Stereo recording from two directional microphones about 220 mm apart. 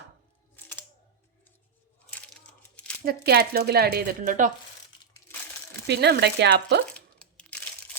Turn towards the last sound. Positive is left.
turn(degrees=5)  # may be behind; listen again after turning